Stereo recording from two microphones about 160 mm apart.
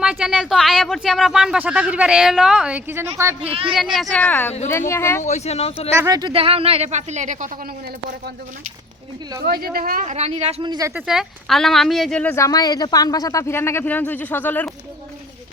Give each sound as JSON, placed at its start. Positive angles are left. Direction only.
{"t": 0.0, "sound": "speech", "side_deg": -5}
{"t": 3.5, "sound": "speech", "side_deg": -35}
{"t": 3.9, "sound": "speech", "side_deg": 5}
{"t": 5.2, "sound": "speech", "side_deg": 45}
{"t": 5.9, "sound": "speech", "side_deg": -20}
{"t": 6.3, "sound": "speech", "side_deg": -35}
{"t": 9.4, "sound": "speech", "side_deg": -70}
{"t": 10.6, "sound": "speech", "side_deg": -25}
{"t": 11.0, "sound": "speech", "side_deg": -5}
{"t": 12.2, "sound": "speech", "side_deg": 15}